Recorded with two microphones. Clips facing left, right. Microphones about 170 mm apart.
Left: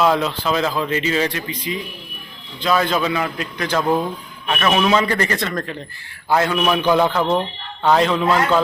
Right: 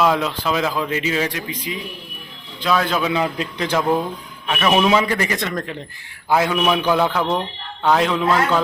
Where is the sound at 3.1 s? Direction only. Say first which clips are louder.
Right 2 dB; 20° right (ahead or behind).